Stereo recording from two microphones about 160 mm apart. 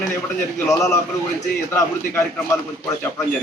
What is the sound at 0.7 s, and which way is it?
Speech, 20° left (ahead or behind).